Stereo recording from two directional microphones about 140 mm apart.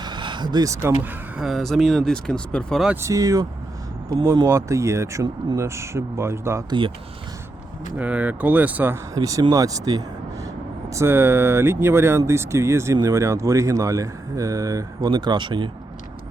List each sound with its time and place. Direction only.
0.0 s speech: 35° right (ahead or behind); by 1.1 s 15° right (ahead or behind)
1.4 s speech: centre (ahead or behind)
2.8 s speech: 15° right (ahead or behind)
6.7 s speech: 35° right (ahead or behind)
7.9 s speech: 10° right (ahead or behind)
9.1 s speech: 25° right (ahead or behind)